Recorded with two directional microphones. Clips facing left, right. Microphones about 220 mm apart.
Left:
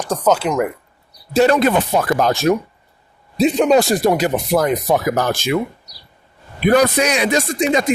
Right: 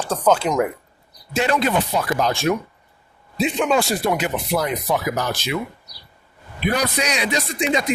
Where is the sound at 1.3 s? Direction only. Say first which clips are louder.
Left 6 dB; 40° left (ahead or behind).